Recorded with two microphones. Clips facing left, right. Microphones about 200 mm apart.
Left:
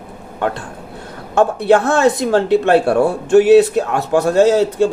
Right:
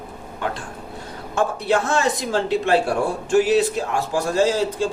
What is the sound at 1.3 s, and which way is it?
Speech, 65° left (ahead or behind).